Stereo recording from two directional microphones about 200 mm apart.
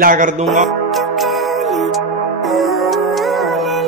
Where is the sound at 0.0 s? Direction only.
40° right (ahead or behind).